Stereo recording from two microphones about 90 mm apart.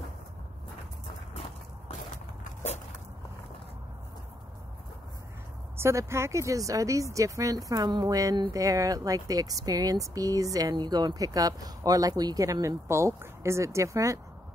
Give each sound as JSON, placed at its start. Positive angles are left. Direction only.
{"t": 5.8, "sound": "speech", "side_deg": -30}